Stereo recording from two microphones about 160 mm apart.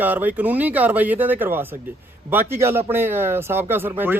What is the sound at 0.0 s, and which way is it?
Speech, 10° right (ahead or behind).